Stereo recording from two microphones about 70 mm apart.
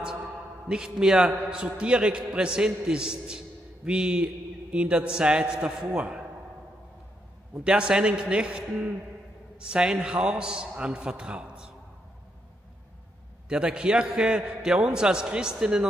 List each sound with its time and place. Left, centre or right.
0.7 s a man's voice: centre
7.6 s a man's voice: centre
13.5 s a man's voice: centre